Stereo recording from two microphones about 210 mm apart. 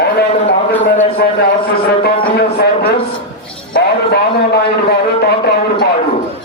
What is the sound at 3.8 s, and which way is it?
A man's voice, 50° left (ahead or behind).